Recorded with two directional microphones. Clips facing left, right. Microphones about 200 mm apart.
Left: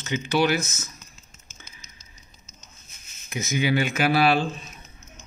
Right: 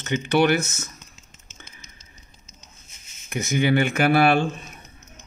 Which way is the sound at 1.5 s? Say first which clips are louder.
Right 3 dB; 55° right (ahead or behind).